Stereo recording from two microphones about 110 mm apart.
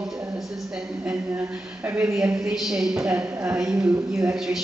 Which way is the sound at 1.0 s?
20° right (ahead or behind).